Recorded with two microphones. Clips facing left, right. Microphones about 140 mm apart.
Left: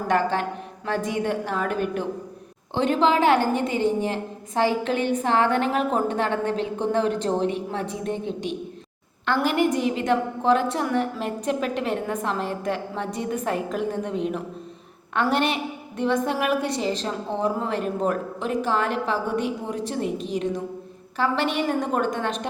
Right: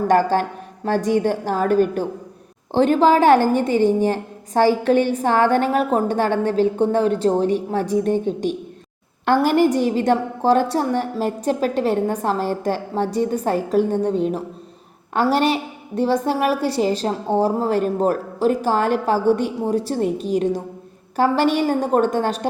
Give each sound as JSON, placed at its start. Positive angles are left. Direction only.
{"t": 0.1, "sound": "a woman's voice", "side_deg": -40}